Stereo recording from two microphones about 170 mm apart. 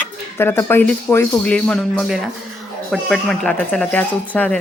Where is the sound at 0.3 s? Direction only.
15° left (ahead or behind).